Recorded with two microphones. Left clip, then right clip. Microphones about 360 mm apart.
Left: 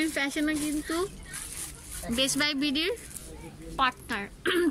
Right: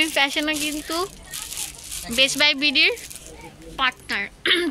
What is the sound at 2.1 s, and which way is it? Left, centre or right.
A woman's voice, centre.